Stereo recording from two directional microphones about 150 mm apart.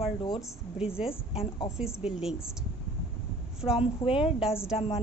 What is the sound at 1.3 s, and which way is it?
Speech, 40° left (ahead or behind).